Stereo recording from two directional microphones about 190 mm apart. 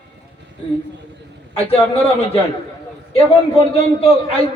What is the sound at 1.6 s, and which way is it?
Speech, 30° left (ahead or behind).